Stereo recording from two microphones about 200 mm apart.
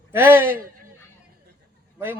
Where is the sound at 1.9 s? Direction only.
10° right (ahead or behind).